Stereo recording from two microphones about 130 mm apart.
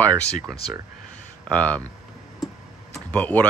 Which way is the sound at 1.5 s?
10° left (ahead or behind).